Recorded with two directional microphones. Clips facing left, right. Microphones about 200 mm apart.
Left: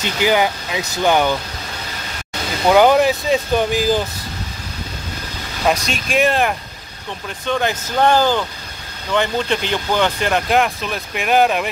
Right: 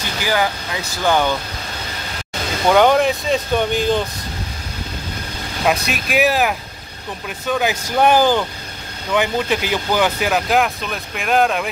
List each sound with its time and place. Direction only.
0.0 s speech: 20° left (ahead or behind)
2.7 s speech: 5° left (ahead or behind)
5.9 s speech: 5° right (ahead or behind)